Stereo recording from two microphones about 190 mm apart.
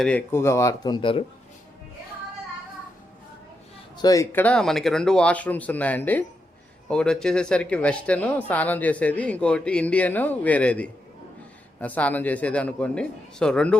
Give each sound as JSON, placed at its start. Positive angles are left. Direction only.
{"t": 0.0, "sound": "speech", "side_deg": 5}
{"t": 3.9, "sound": "speech", "side_deg": 20}